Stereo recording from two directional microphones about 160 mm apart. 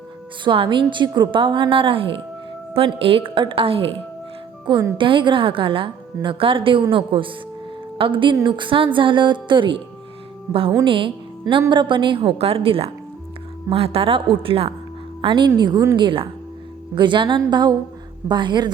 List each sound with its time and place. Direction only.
0.4 s a woman's voice: 30° right (ahead or behind)
10.5 s a woman's voice: 20° right (ahead or behind)
10.8 s a woman's voice: 30° right (ahead or behind)